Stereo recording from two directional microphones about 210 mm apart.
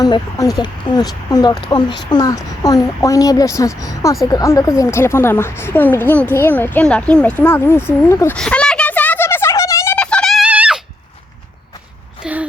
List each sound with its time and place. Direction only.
0.0 s speech: 15° left (ahead or behind)
8.4 s a sound: 5° left (ahead or behind)
12.2 s wail: 5° right (ahead or behind)